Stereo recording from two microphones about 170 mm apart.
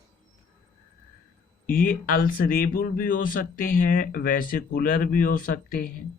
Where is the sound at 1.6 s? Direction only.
55° left (ahead or behind).